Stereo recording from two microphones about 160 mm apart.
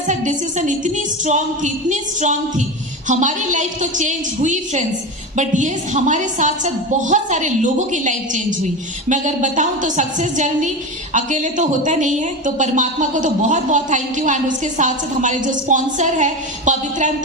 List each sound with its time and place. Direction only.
0.1 s speech: 50° right (ahead or behind)